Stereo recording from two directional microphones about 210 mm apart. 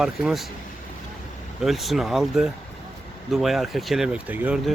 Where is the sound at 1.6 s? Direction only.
Centre (ahead or behind).